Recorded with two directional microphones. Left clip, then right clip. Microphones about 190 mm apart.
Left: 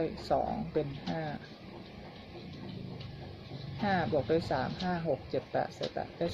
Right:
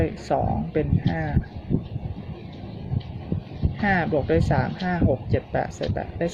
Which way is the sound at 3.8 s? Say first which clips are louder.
Right 8 dB; 30° right (ahead or behind).